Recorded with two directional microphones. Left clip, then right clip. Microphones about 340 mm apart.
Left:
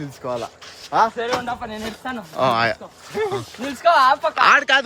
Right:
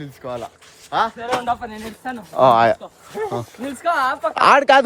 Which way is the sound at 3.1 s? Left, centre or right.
Left.